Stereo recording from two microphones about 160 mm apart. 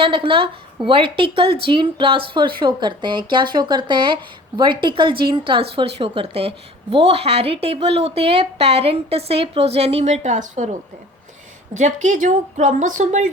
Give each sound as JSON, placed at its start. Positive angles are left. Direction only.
{"t": 0.0, "sound": "a woman's voice", "side_deg": -35}